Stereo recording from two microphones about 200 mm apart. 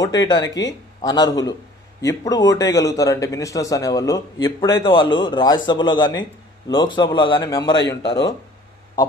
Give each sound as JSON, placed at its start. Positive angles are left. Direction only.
{"t": 0.0, "sound": "a man's voice", "side_deg": 20}